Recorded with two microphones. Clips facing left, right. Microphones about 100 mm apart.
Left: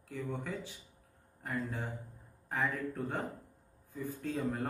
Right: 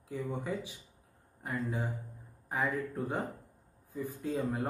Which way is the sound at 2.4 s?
15° right (ahead or behind).